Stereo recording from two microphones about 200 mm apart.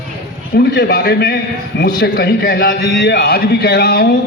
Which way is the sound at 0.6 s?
55° left (ahead or behind).